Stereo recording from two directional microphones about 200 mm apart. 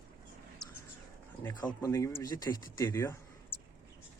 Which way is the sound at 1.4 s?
20° left (ahead or behind).